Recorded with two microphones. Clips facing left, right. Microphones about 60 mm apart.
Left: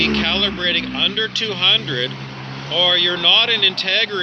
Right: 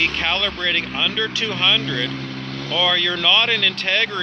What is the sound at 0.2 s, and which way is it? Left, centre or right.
Speech, right.